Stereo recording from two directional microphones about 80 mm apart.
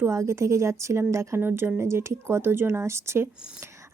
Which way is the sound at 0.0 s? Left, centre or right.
Right.